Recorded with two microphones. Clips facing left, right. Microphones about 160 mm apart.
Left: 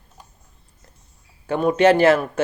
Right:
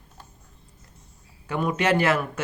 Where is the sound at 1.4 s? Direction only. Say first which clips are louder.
Left 8 dB; 30° left (ahead or behind).